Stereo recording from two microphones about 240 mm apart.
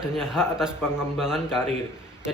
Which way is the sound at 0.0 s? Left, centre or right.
Centre.